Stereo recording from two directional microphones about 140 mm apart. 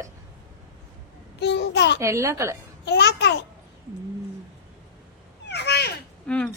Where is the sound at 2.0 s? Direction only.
20° right (ahead or behind).